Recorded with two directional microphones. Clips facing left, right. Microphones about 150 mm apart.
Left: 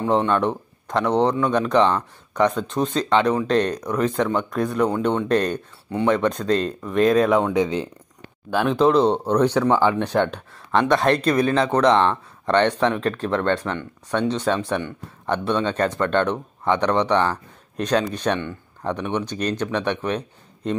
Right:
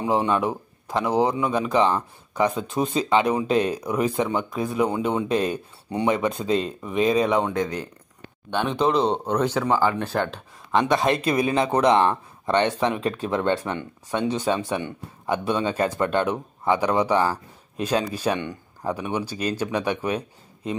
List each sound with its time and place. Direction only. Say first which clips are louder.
0.0 s speech: left 2 dB; 10° right (ahead or behind)
5.9 s speech: left 2 dB; 15° right (ahead or behind)
6.1 s speech: left 2 dB; 5° right (ahead or behind)
7.5 s speech: left 5 dB; 20° left (ahead or behind)
8.5 s speech: left 4 dB; centre (ahead or behind)
9.0 s speech: left 4 dB; 10° left (ahead or behind)
9.4 s speech: left 4 dB; 10° right (ahead or behind)